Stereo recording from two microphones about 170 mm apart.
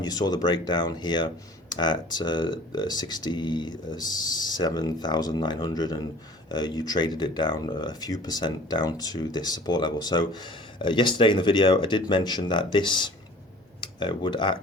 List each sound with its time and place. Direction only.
0.0 s speech: 25° left (ahead or behind)